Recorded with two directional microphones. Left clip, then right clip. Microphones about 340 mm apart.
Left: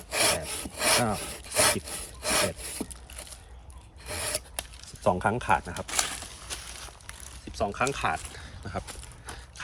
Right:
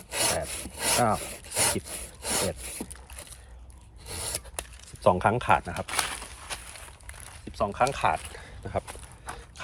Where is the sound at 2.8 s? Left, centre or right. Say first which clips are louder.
Left 2 dB; centre.